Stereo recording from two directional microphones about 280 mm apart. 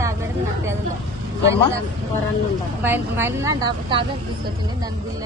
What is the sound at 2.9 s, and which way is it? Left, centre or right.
Speech, centre.